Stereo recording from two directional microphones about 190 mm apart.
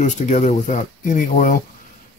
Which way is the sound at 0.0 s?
40° left (ahead or behind).